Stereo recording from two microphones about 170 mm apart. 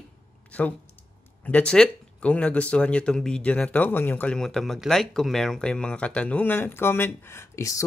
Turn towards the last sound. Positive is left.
turn(degrees=15)  # may be behind; listen again after turning